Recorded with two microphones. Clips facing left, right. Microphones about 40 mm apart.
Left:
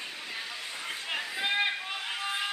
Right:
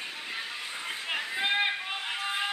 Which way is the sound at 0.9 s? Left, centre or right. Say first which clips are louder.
Right 2 dB; centre.